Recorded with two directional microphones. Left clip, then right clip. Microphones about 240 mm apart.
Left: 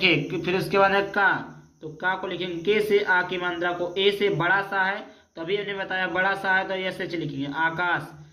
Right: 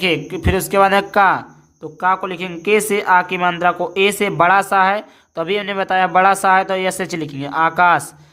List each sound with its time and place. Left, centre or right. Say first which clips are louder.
0.0 s speech: right 4 dB; right